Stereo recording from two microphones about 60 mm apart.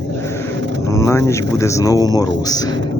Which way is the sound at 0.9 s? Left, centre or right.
Left.